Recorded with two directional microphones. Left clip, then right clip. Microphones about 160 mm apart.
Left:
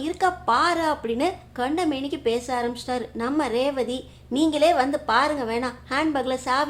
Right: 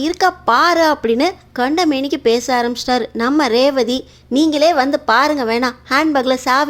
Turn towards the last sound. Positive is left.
turn(degrees=-40)  # may be behind; listen again after turning